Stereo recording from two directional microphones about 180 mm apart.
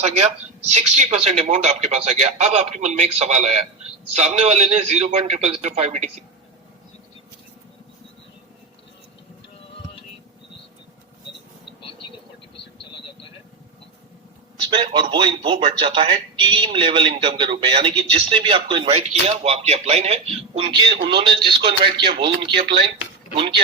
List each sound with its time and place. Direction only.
0.0 s speech: 35° right (ahead or behind)
14.7 s speech: 30° right (ahead or behind)